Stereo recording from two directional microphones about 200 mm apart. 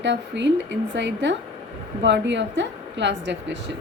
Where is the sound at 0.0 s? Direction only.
60° right (ahead or behind).